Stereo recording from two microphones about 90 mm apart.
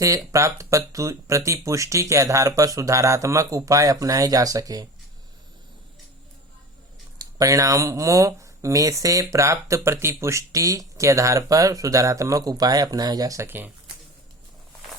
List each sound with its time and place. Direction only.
0.3 s speech: 35° right (ahead or behind)
7.2 s speech: 40° right (ahead or behind)